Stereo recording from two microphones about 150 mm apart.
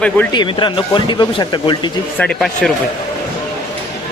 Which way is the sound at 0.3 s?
30° left (ahead or behind).